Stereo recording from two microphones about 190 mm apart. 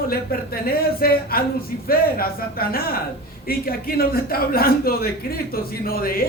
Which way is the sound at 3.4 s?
50° left (ahead or behind).